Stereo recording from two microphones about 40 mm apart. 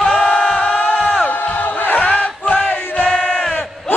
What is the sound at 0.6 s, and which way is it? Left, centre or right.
Crowd, left.